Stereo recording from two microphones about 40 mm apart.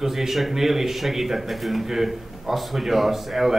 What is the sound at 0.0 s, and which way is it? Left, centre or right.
A man's voice, centre.